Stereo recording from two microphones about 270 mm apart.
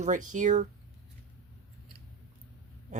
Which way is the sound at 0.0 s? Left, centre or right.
Right.